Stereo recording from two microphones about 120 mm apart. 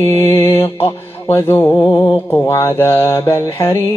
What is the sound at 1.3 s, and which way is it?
Speech, 20° left (ahead or behind).